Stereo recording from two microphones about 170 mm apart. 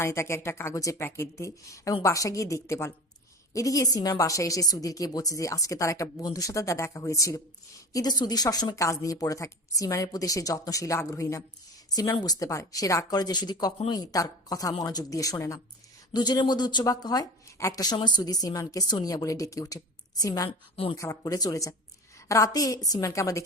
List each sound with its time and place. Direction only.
0.0 s speech: 15° left (ahead or behind)